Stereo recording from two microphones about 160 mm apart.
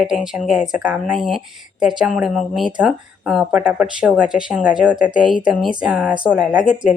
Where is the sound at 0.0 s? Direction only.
5° right (ahead or behind).